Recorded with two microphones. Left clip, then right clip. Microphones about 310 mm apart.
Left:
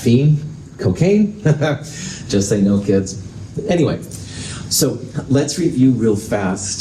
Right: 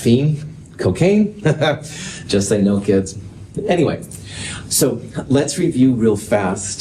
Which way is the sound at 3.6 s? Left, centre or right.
Right.